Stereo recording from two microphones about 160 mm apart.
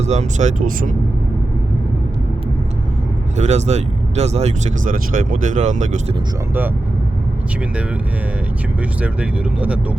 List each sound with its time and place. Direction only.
0.0 s speech: 45° right (ahead or behind)
3.3 s speech: 45° right (ahead or behind)
8.8 s speech: 10° right (ahead or behind)